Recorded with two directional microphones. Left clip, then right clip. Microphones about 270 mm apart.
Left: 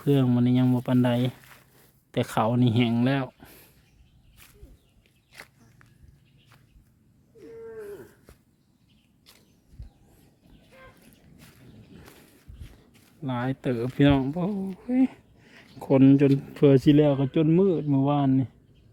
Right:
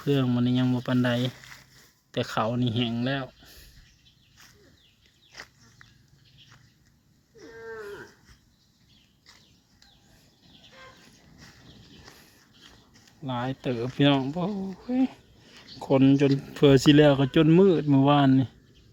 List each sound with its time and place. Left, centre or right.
0.0 s speech: centre
12.9 s speech: centre